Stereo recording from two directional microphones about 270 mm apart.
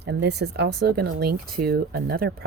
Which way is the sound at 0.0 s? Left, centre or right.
Right.